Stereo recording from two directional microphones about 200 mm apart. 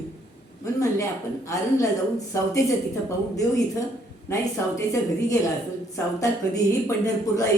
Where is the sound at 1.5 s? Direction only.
15° left (ahead or behind).